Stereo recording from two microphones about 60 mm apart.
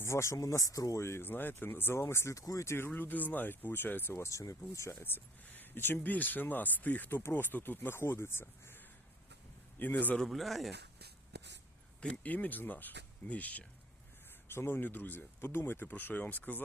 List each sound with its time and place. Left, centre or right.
0.0 s speech: left
1.0 s speech: left
1.3 s speech: left
2.3 s speech: left
2.6 s speech: left
4.2 s speech: left
7.2 s speech: left
9.7 s speech: left
10.2 s speech: centre
12.0 s speech: left
14.4 s speech: left